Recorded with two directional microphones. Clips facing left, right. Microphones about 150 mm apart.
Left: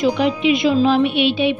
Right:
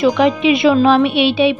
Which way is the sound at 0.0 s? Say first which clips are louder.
Right 4 dB; 75° right (ahead or behind).